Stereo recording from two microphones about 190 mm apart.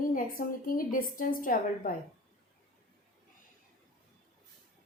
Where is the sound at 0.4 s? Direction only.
50° left (ahead or behind).